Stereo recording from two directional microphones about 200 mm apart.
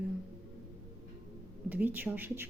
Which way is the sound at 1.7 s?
10° right (ahead or behind).